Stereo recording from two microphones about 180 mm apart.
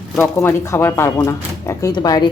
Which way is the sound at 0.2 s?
15° left (ahead or behind).